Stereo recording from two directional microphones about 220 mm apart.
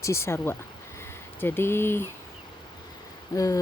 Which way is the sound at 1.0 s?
10° left (ahead or behind).